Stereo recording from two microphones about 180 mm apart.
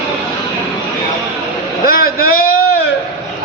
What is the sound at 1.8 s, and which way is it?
Vehicle, 55° left (ahead or behind).